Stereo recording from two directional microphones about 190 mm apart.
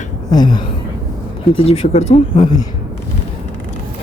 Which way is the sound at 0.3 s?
20° left (ahead or behind).